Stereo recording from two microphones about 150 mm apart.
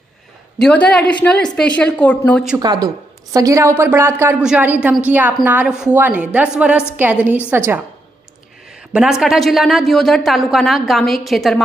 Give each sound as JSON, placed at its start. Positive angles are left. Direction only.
{"t": 0.6, "sound": "a woman's voice", "side_deg": 5}
{"t": 2.6, "sound": "a woman's voice", "side_deg": -25}
{"t": 8.7, "sound": "a woman's voice", "side_deg": -5}